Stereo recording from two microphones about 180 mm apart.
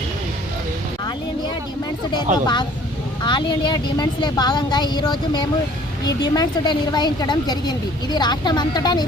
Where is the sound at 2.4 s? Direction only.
25° left (ahead or behind).